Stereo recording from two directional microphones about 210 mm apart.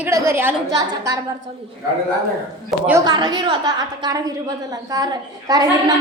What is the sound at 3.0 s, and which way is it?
A woman's voice, 20° right (ahead or behind).